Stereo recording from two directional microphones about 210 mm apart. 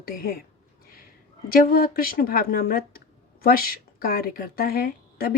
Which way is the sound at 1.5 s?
45° left (ahead or behind).